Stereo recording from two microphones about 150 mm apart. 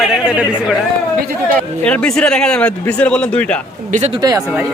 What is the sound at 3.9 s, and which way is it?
Speech, 55° right (ahead or behind).